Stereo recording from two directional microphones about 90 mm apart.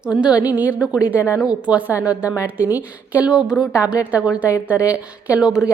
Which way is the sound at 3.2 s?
5° right (ahead or behind).